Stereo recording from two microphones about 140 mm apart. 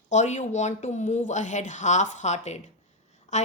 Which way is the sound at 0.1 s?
55° left (ahead or behind).